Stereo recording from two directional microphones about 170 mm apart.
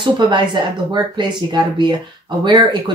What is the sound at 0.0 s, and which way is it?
Speech, 25° right (ahead or behind).